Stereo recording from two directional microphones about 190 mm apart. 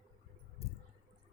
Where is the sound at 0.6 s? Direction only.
35° left (ahead or behind).